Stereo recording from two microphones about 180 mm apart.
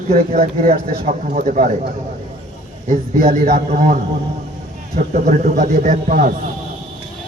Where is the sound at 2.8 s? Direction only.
45° right (ahead or behind).